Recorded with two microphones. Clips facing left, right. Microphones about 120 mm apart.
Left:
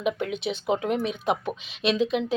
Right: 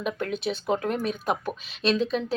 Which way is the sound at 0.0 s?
20° left (ahead or behind).